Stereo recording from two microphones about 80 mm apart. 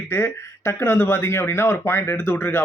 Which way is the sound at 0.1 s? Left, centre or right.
Left.